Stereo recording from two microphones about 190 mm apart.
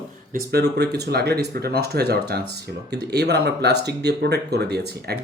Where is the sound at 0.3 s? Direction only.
60° right (ahead or behind).